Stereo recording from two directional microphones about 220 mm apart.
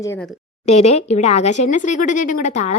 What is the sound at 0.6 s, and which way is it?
Speech, 30° left (ahead or behind).